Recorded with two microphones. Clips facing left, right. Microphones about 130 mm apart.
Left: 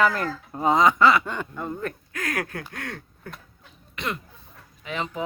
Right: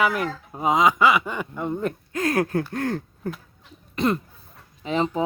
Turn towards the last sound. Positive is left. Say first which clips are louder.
# right 7 dB
turn(degrees=-30)  # may be behind; listen again after turning